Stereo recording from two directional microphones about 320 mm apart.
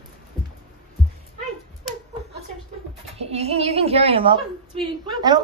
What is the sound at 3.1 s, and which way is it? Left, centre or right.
A woman's voice, centre.